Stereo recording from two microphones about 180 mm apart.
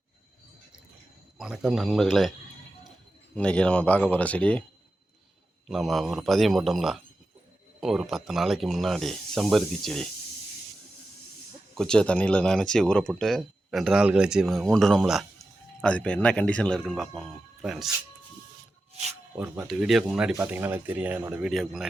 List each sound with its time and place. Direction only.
1.4 s speech: 5° right (ahead or behind)
3.3 s speech: 5° left (ahead or behind)
5.6 s speech: centre (ahead or behind)
11.8 s speech: 5° left (ahead or behind)
19.6 s speech: centre (ahead or behind)